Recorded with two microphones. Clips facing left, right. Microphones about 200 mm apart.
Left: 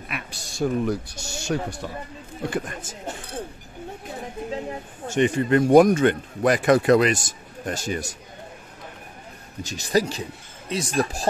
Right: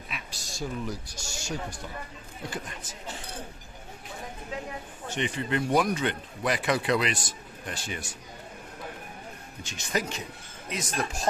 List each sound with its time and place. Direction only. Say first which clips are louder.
0.1 s speech: left 6 dB; 60° left (ahead or behind)
2.5 s speech: left 9 dB; 50° left (ahead or behind)
5.0 s speech: left 10 dB; 45° left (ahead or behind)
9.6 s speech: left 9 dB; 35° left (ahead or behind)